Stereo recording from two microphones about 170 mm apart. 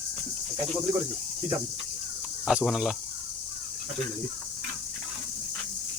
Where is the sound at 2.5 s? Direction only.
5° right (ahead or behind).